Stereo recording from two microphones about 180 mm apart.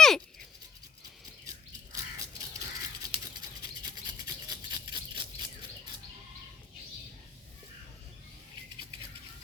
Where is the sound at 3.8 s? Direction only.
20° right (ahead or behind).